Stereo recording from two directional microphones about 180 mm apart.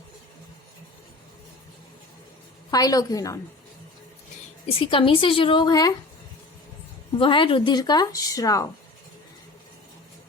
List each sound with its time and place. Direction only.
2.6 s a woman's voice: 20° left (ahead or behind)
4.8 s a woman's voice: 30° left (ahead or behind)
7.2 s a woman's voice: 30° left (ahead or behind)